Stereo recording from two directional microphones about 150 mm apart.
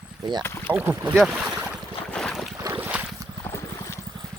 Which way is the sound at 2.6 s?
10° right (ahead or behind).